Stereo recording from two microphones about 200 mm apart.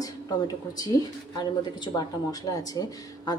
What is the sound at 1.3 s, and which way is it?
Speech, 20° left (ahead or behind).